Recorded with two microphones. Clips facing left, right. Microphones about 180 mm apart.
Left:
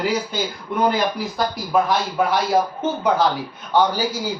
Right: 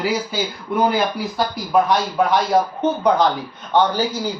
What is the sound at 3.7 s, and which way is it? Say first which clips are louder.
Speech: right 1 dB; 10° left (ahead or behind).